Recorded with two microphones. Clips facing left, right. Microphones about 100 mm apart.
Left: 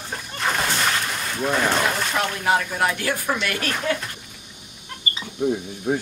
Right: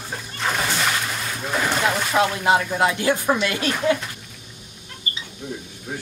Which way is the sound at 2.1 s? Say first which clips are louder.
Right 5 dB; 15° right (ahead or behind).